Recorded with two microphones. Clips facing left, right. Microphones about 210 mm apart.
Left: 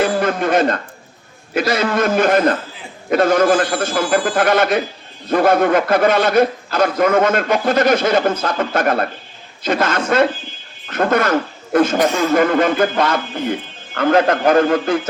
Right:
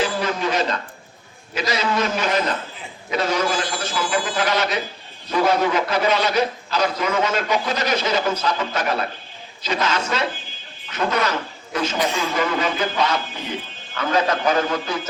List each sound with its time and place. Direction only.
0.0 s speech: 55° left (ahead or behind)